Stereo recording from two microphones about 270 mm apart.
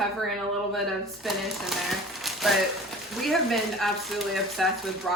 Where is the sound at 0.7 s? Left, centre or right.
Centre.